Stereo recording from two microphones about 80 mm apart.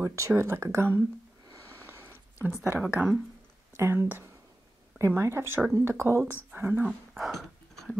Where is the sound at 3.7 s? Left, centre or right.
Right.